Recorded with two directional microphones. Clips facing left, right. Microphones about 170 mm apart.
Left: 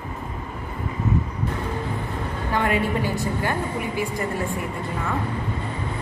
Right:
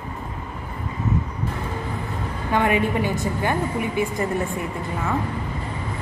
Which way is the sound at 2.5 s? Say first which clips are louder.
Right 2 dB; 20° right (ahead or behind).